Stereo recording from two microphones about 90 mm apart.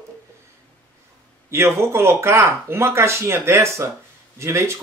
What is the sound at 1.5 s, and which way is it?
Speech, 30° right (ahead or behind).